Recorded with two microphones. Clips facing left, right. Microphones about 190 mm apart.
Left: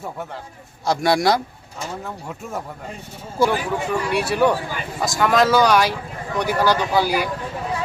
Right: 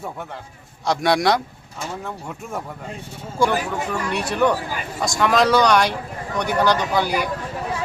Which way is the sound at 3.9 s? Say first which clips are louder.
Left 5 dB; 10° left (ahead or behind).